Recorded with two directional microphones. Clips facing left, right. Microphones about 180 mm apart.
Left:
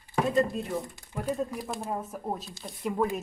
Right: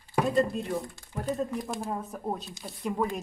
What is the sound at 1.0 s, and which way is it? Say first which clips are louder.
Speech: even; 10° left (ahead or behind).